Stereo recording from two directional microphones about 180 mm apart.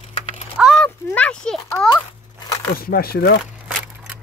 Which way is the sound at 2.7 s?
55° left (ahead or behind).